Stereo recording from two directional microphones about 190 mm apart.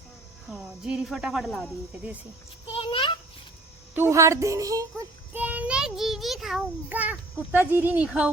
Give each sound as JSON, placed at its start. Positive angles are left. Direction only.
{"t": 0.4, "sound": "speech", "side_deg": 0}
{"t": 2.6, "sound": "a sound", "side_deg": 25}
{"t": 3.9, "sound": "a child's voice", "side_deg": -15}